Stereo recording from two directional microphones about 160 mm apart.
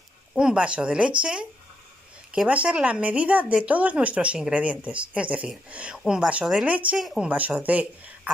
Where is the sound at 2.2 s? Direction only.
5° right (ahead or behind).